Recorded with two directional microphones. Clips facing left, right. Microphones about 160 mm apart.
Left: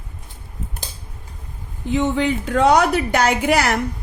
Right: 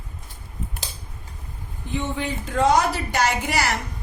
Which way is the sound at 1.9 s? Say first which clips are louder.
Left 8 dB; 85° left.